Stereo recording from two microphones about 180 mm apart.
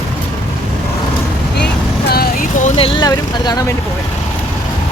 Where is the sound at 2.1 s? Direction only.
55° left (ahead or behind).